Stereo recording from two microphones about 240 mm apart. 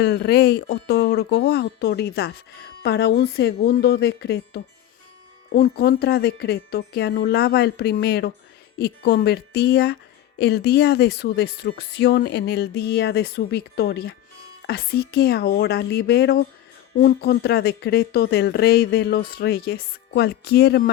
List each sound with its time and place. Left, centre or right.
0.0 s speech: left